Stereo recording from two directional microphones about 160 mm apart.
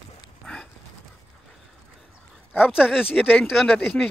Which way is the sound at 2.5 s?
10° left (ahead or behind).